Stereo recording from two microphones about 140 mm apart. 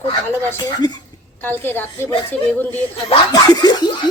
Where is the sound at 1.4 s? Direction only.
15° left (ahead or behind).